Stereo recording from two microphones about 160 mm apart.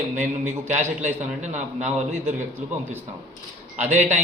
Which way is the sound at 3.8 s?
50° right (ahead or behind).